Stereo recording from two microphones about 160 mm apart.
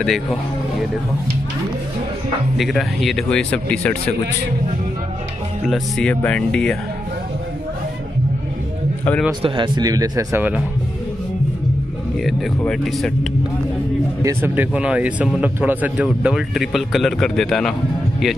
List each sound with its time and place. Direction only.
0.0 s a man's voice: 5° left (ahead or behind)
2.5 s a man's voice: centre (ahead or behind)
5.7 s a man's voice: 5° left (ahead or behind)
9.4 s speech: 25° right (ahead or behind)
12.2 s a man's voice: centre (ahead or behind)
14.2 s a man's voice: 15° right (ahead or behind)